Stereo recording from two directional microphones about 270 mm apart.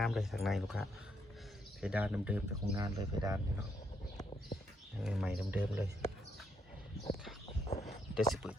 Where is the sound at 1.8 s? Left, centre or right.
Centre.